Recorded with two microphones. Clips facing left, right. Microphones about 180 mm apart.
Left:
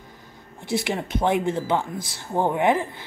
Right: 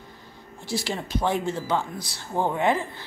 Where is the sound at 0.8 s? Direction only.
20° left (ahead or behind).